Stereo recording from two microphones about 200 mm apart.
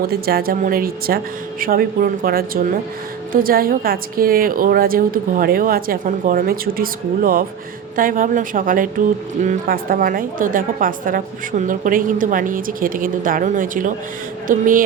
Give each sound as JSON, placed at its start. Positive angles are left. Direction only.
{"t": 0.1, "sound": "a woman's voice", "side_deg": -50}